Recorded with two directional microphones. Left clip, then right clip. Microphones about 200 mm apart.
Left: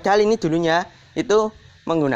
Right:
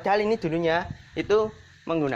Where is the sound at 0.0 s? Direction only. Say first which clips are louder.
Left 6 dB; 55° left (ahead or behind).